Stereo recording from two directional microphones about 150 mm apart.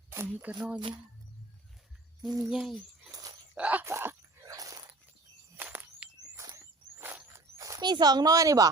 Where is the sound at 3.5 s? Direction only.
10° right (ahead or behind).